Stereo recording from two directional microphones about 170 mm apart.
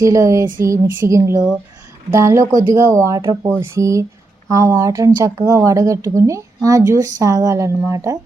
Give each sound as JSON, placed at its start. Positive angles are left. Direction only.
{"t": 0.0, "sound": "speech", "side_deg": -20}